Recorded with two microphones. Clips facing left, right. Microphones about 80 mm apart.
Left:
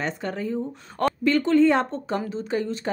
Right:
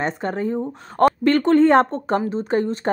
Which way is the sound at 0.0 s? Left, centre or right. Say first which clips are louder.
Right 5 dB; right.